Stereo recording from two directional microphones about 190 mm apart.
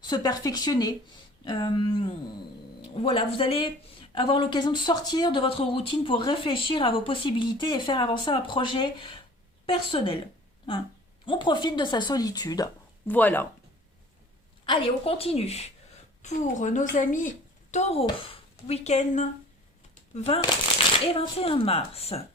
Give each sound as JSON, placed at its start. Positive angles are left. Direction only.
{"t": 0.0, "sound": "speech", "side_deg": 20}
{"t": 11.3, "sound": "speech", "side_deg": 25}
{"t": 13.1, "sound": "speech", "side_deg": 10}
{"t": 14.7, "sound": "a woman's voice", "side_deg": 30}
{"t": 21.1, "sound": "a woman's voice", "side_deg": 30}